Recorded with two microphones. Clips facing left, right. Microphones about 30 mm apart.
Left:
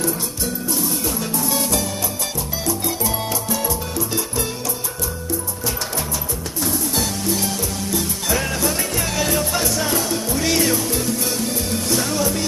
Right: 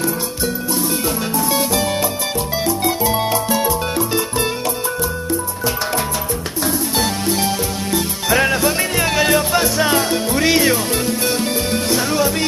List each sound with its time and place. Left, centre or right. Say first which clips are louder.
1.3 s music: right 4 dB; right
6.6 s music: right 3 dB; right
9.8 s music: right 5 dB; right